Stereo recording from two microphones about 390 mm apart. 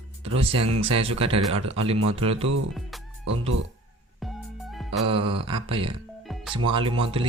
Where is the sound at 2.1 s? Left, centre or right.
Centre.